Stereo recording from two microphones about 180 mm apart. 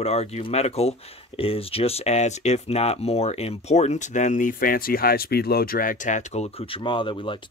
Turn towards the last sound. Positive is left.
turn(degrees=30)  # may be behind; listen again after turning